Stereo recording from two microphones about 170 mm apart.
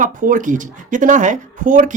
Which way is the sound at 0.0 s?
50° right (ahead or behind).